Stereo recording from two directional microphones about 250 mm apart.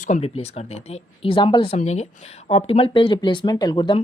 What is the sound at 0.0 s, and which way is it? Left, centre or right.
Speech, left.